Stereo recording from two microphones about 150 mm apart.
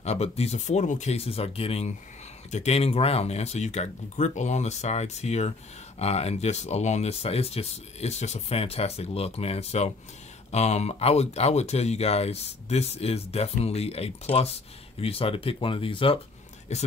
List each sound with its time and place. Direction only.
0.0 s speech: 45° left (ahead or behind)
16.7 s speech: 45° left (ahead or behind)